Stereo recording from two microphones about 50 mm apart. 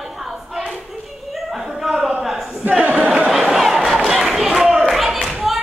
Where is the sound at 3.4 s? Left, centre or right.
Centre.